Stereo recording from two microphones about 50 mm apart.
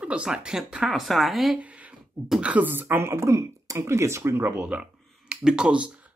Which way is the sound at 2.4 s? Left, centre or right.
Right.